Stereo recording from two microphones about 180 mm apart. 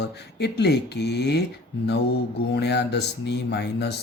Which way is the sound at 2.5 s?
70° left (ahead or behind).